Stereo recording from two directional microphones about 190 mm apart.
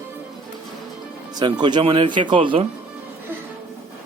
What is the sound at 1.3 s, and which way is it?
Speech, 20° right (ahead or behind).